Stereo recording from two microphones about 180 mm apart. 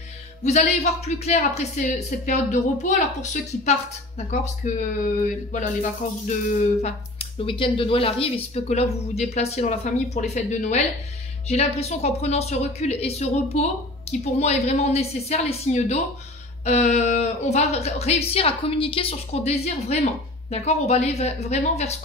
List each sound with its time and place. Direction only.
0.4 s speech: 40° left (ahead or behind)